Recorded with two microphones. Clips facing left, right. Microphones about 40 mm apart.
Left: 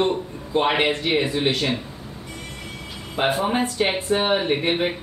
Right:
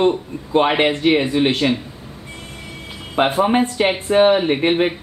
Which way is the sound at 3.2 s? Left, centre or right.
Right.